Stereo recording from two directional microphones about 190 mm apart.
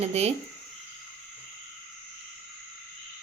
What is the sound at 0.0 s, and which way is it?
Speech, 35° right (ahead or behind).